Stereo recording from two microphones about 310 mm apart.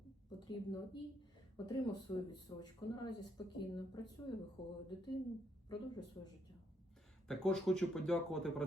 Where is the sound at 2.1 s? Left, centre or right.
Centre.